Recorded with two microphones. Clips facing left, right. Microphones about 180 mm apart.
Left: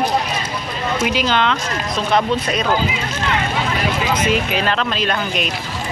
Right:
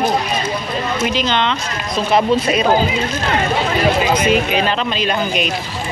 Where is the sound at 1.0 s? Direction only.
10° left (ahead or behind).